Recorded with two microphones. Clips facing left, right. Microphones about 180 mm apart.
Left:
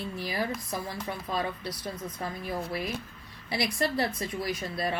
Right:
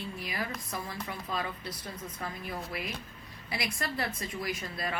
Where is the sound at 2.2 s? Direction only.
30° left (ahead or behind).